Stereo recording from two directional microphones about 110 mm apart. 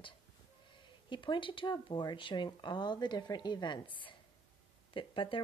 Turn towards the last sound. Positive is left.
turn(degrees=50)  # may be behind; listen again after turning